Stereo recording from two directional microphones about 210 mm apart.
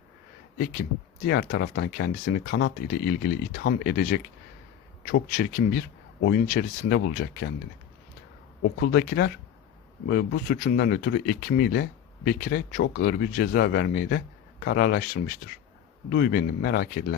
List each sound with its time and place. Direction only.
0.6 s speech: 45° left (ahead or behind)
8.8 s speech: 50° left (ahead or behind)